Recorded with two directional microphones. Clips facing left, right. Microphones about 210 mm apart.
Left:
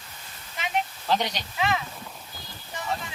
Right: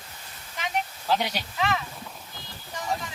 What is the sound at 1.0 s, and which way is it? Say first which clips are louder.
Speech: right 1 dB; 10° right (ahead or behind).